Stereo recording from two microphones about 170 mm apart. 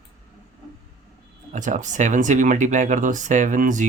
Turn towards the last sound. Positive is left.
turn(degrees=-50)  # may be behind; listen again after turning